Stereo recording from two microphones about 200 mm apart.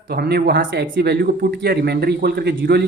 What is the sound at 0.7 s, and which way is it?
Speech, 65° right (ahead or behind).